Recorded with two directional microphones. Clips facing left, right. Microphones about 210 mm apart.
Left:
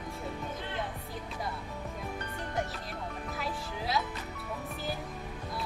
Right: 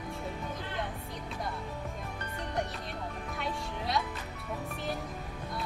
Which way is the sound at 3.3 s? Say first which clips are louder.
Right 1 dB; centre (ahead or behind).